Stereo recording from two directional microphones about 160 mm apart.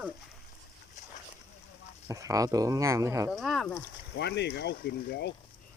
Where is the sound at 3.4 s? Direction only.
Centre (ahead or behind).